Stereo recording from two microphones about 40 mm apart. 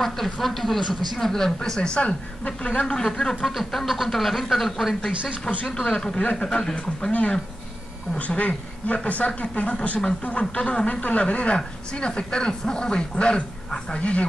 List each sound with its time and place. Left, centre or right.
0.0 s speech: centre
1.6 s speech: left
2.0 s speech: left
2.8 s speech: left
3.1 s speech: centre
3.7 s speech: centre
5.7 s speech: centre
7.1 s speech: left
13.9 s speech: left